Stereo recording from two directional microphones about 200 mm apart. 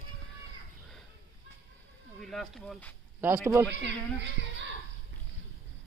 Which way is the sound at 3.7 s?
60° right (ahead or behind).